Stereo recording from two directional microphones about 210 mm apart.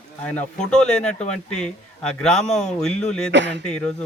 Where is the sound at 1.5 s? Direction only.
5° left (ahead or behind).